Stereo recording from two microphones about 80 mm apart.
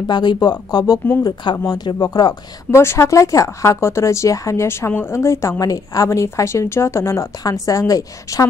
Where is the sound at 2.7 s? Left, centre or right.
Left.